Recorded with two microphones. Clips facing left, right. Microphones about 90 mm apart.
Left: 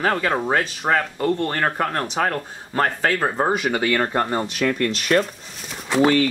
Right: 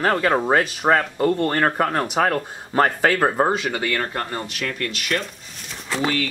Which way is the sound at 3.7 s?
20° left (ahead or behind).